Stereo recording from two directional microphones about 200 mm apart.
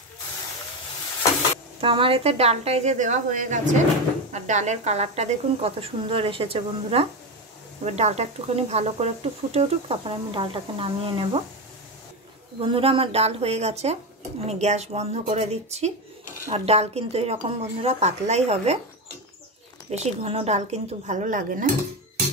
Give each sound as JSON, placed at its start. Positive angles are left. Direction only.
{"t": 1.8, "sound": "a woman's voice", "side_deg": -25}
{"t": 12.5, "sound": "speech", "side_deg": -25}
{"t": 19.9, "sound": "speech", "side_deg": -35}